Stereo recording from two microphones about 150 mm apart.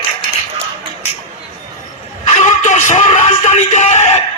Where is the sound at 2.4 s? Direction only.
55° left (ahead or behind).